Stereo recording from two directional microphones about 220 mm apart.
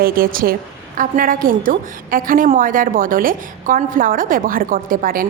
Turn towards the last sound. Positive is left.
turn(degrees=-40)  # may be behind; listen again after turning